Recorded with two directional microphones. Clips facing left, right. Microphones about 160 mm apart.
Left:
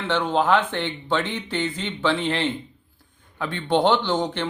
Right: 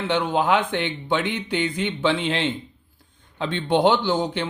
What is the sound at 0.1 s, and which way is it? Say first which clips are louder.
A man's voice: left 1 dB; 15° right (ahead or behind).